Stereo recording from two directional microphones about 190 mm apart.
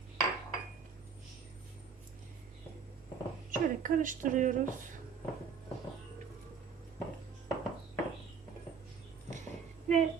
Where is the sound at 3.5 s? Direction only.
45° right (ahead or behind).